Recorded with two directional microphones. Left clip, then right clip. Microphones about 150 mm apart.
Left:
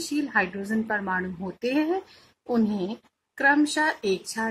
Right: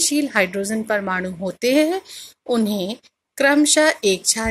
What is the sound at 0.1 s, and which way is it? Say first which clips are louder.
A woman's voice: right 6 dB; 25° right (ahead or behind).